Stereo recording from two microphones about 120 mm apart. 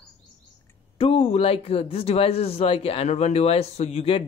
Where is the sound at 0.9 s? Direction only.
50° left (ahead or behind).